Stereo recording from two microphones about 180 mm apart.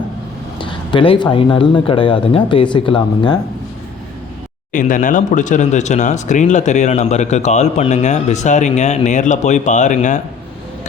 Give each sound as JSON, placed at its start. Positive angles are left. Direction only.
{"t": 0.6, "sound": "speech", "side_deg": 30}
{"t": 4.7, "sound": "speech", "side_deg": 45}